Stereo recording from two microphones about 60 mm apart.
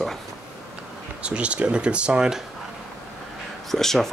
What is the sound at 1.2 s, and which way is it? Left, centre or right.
Speech, centre.